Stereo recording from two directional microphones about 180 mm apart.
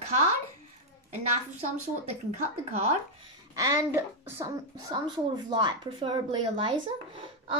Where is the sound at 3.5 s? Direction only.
20° right (ahead or behind).